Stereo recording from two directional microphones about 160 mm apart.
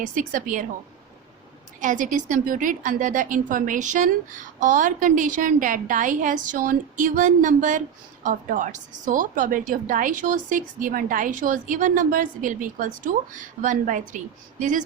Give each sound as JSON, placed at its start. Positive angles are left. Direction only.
{"t": 0.0, "sound": "a woman's voice", "side_deg": -55}
{"t": 1.8, "sound": "a woman's voice", "side_deg": -55}